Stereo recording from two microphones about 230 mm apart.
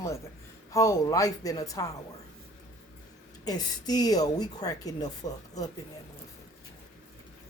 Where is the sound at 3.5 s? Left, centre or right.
Centre.